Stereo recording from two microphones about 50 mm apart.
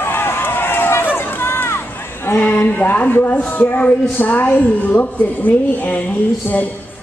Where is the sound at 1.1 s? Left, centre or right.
Left.